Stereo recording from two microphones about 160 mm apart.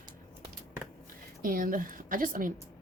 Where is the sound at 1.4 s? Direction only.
60° right (ahead or behind).